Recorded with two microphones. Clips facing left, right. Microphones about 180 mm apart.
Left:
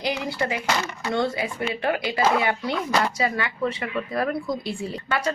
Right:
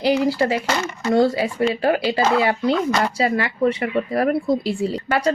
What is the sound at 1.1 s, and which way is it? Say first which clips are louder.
A woman's voice: right 8 dB; 30° right (ahead or behind).